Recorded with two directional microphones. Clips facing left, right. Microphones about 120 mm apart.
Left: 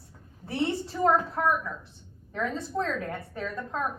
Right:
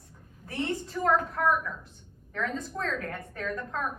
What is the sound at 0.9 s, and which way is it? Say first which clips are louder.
A woman's voice: left 1 dB; 15° left (ahead or behind).